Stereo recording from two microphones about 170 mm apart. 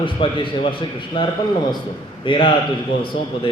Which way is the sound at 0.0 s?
30° left (ahead or behind).